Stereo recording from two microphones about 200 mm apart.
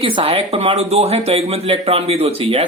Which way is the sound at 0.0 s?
25° right (ahead or behind).